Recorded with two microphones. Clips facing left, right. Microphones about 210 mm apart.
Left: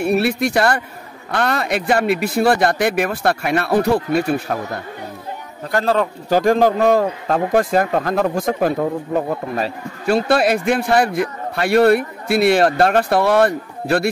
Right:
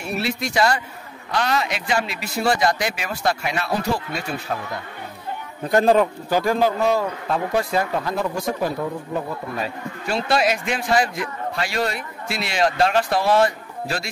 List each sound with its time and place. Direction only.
0.0 s a man's voice: 60° left (ahead or behind)
5.7 s a man's voice: 20° right (ahead or behind)
6.3 s a man's voice: 45° left (ahead or behind)
8.4 s a man's voice: 75° left (ahead or behind); by 14.0 s 60° left (ahead or behind)